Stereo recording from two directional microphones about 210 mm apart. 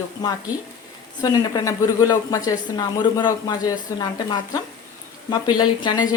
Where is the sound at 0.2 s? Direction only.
20° left (ahead or behind).